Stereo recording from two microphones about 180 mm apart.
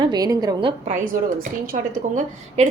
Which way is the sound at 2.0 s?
45° right (ahead or behind).